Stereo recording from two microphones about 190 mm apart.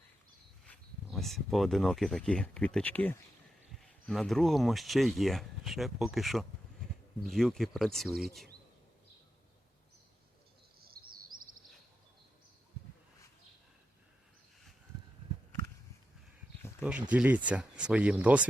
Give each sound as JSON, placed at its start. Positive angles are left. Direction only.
{"t": 0.6, "sound": "speech", "side_deg": 5}
{"t": 10.8, "sound": "a sound", "side_deg": -50}
{"t": 16.8, "sound": "speech", "side_deg": -5}